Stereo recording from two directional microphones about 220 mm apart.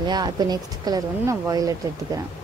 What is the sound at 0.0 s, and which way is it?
Speech, 20° right (ahead or behind).